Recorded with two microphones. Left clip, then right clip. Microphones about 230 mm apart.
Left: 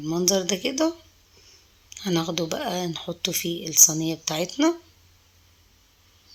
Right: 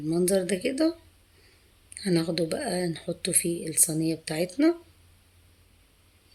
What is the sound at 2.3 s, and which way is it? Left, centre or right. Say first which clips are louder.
Speech: left 1 dB; left.